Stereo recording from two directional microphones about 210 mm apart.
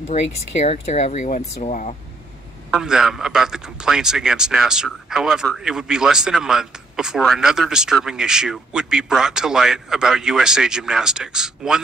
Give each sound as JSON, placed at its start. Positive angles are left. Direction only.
{"t": 0.1, "sound": "speech", "side_deg": 30}
{"t": 2.7, "sound": "a man's voice", "side_deg": 0}